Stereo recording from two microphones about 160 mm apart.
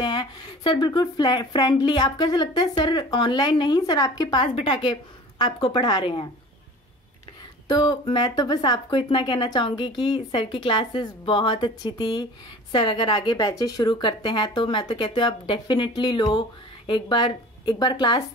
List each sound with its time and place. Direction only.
0.0 s a woman's voice: 30° left (ahead or behind)
7.6 s speech: 25° left (ahead or behind)